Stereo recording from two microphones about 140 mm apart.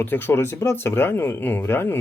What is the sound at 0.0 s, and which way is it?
Speech, 15° left (ahead or behind).